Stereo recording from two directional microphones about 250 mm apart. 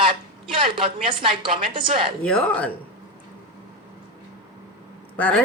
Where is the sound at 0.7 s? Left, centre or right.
Centre.